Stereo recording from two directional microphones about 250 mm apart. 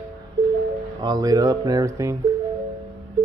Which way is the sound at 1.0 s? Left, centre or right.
Centre.